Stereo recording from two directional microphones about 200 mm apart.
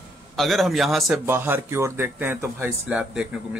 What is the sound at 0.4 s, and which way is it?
Speech, centre (ahead or behind).